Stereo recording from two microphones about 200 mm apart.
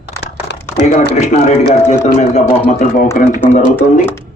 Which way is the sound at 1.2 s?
35° left (ahead or behind).